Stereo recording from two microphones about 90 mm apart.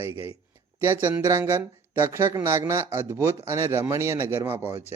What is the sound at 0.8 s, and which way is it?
A man's voice, 25° right (ahead or behind).